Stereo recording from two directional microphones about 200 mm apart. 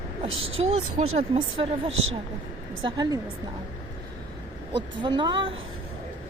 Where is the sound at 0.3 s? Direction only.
80° right.